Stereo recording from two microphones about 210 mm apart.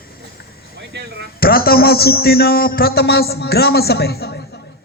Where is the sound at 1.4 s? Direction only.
45° left (ahead or behind).